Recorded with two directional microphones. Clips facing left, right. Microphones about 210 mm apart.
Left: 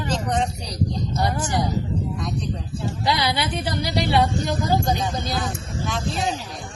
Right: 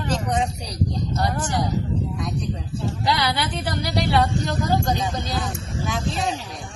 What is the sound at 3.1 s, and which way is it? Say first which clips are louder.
Speech: left 1 dB; 15° left (ahead or behind).